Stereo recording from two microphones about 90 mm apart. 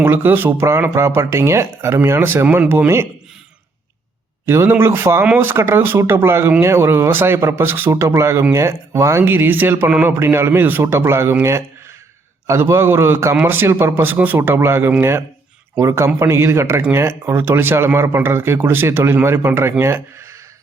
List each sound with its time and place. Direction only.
0.0 s speech: 25° right (ahead or behind)
4.4 s a man's voice: 30° right (ahead or behind)